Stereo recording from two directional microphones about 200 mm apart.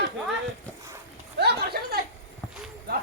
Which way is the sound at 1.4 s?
55° right (ahead or behind).